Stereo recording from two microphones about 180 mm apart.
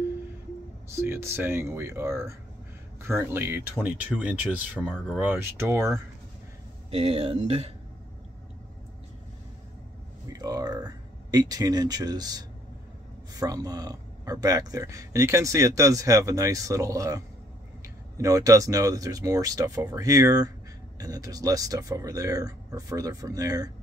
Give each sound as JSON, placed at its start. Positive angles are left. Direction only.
{"t": 1.0, "sound": "speech", "side_deg": -15}
{"t": 4.9, "sound": "speech", "side_deg": 0}
{"t": 5.2, "sound": "speech", "side_deg": -10}
{"t": 6.9, "sound": "speech", "side_deg": -35}
{"t": 10.3, "sound": "speech", "side_deg": -20}